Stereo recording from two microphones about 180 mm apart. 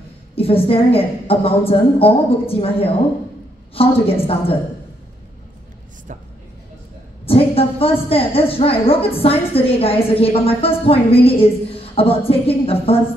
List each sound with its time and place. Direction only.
0.4 s a woman's voice: 30° left (ahead or behind)
7.2 s a woman's voice: 30° left (ahead or behind)
11.7 s a sound: 30° left (ahead or behind)
12.3 s a woman's voice: 30° left (ahead or behind)